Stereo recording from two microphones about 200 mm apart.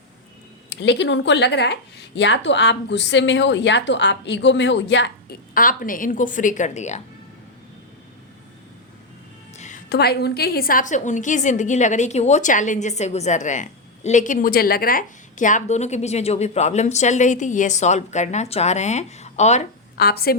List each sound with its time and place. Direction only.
0.7 s speech: 60° left (ahead or behind)
5.5 s a woman's voice: 45° left (ahead or behind)
9.6 s music: 35° left (ahead or behind)
9.9 s a woman's voice: 50° left (ahead or behind); by 19.6 s 35° left (ahead or behind)
20.0 s a woman's voice: 50° left (ahead or behind)